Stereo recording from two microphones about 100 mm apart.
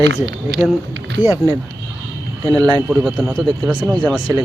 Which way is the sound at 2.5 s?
40° right (ahead or behind).